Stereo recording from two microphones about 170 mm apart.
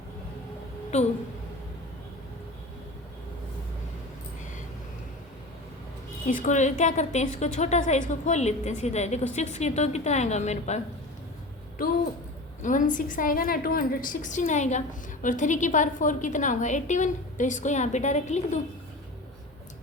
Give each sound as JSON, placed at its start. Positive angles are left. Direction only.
{"t": 0.9, "sound": "speech", "side_deg": 40}
{"t": 6.2, "sound": "a woman's voice", "side_deg": 45}
{"t": 12.6, "sound": "a woman's voice", "side_deg": 50}